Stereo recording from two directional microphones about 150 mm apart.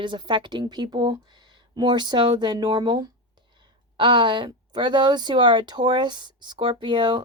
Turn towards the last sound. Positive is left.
turn(degrees=-30)  # may be behind; listen again after turning